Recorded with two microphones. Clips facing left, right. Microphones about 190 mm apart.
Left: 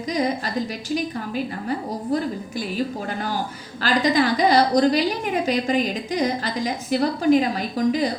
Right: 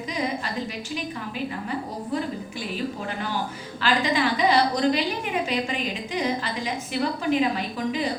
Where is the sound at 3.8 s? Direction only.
40° left (ahead or behind).